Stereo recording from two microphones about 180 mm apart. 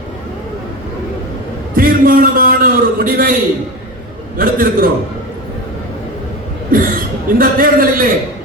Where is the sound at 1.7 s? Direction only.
50° right (ahead or behind).